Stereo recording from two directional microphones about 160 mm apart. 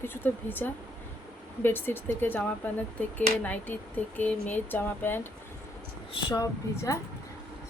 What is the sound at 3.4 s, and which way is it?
A woman's voice, 10° left (ahead or behind).